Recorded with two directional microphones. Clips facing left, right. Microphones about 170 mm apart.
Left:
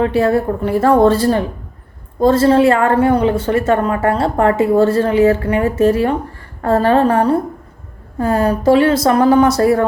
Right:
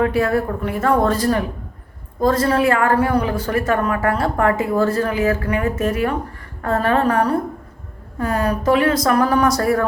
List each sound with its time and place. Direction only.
0.0 s a woman's voice: 25° left (ahead or behind)